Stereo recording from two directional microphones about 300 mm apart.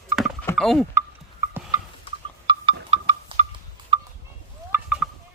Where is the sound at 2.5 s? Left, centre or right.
Centre.